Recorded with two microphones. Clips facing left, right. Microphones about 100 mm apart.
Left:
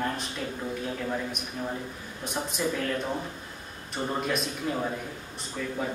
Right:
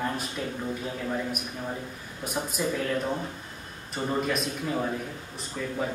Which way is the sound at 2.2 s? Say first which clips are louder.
Right 1 dB; 5° right (ahead or behind).